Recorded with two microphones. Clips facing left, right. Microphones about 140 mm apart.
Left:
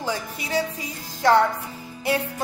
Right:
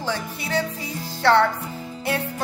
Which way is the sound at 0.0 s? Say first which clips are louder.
Right 1 dB; 10° left (ahead or behind).